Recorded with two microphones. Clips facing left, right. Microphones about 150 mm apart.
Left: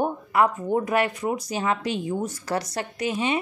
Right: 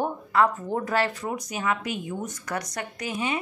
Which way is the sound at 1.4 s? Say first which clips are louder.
Left 3 dB; 30° left (ahead or behind).